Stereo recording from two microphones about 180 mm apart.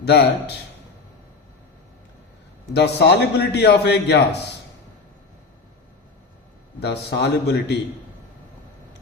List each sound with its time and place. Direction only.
0.0 s a man's voice: 65° left (ahead or behind)
2.7 s a man's voice: 70° left (ahead or behind)
6.7 s a man's voice: 65° left (ahead or behind)